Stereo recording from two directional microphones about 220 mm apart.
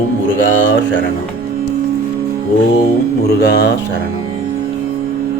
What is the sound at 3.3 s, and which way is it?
Speech, 50° left (ahead or behind).